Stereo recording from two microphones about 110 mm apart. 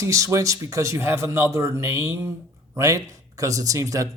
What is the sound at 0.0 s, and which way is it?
Speech, 30° right (ahead or behind).